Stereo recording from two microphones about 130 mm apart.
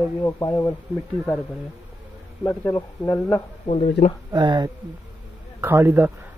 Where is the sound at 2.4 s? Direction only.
20° left (ahead or behind).